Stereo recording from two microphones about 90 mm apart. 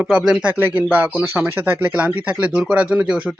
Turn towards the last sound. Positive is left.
turn(degrees=-10)  # may be behind; listen again after turning